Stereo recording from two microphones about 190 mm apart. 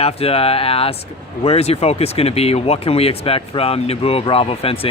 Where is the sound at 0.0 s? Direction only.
30° left (ahead or behind).